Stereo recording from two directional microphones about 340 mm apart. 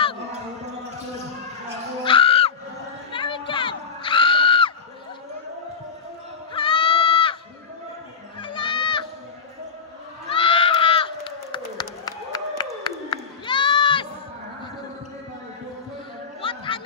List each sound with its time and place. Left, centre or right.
2.0 s a sound: centre
6.5 s goat: centre
8.4 s crowd: centre
10.3 s crowd: centre
13.1 s goat: centre
16.3 s music: centre